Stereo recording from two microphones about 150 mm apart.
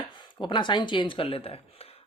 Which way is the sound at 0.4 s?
30° left (ahead or behind).